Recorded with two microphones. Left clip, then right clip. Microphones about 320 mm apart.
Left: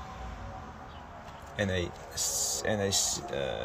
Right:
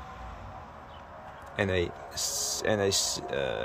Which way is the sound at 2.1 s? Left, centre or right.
Right.